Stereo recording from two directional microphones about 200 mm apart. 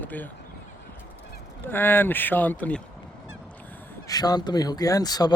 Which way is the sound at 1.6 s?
10° left (ahead or behind).